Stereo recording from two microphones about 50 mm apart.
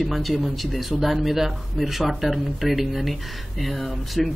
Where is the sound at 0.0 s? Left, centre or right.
Centre.